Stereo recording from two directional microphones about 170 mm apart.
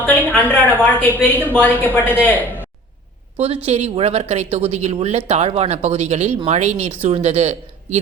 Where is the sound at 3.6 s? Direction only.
35° right (ahead or behind).